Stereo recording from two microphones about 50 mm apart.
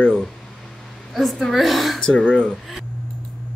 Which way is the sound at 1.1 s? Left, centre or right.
Centre.